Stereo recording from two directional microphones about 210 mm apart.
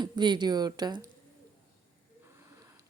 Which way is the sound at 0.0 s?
20° right (ahead or behind).